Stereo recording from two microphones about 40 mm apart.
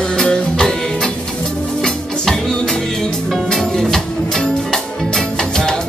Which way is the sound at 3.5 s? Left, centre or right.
Centre.